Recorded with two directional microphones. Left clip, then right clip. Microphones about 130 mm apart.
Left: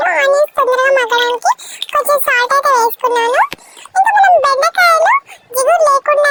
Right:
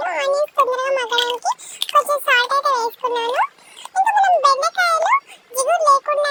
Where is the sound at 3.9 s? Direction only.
45° left (ahead or behind).